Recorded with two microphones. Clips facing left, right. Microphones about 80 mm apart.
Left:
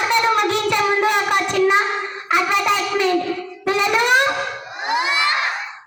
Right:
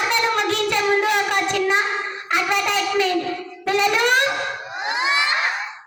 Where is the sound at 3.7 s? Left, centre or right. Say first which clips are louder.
Left 1 dB; centre.